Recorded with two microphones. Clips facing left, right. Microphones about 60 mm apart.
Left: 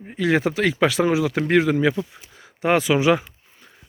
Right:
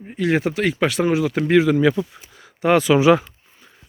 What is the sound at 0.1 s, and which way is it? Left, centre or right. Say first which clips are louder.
Speech: even; left.